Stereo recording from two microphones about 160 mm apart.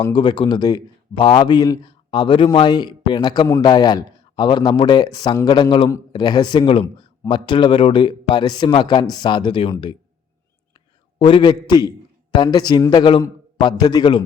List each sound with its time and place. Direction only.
0.1 s a man's voice: 30° left (ahead or behind)
11.2 s a man's voice: 30° left (ahead or behind)